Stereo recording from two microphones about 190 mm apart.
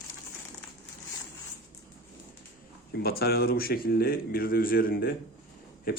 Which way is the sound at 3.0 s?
55° left (ahead or behind).